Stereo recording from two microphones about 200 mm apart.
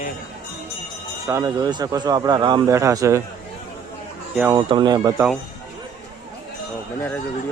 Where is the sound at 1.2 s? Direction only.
15° right (ahead or behind).